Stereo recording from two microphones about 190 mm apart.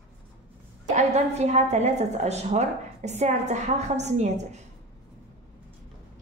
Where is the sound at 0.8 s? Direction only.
35° right (ahead or behind).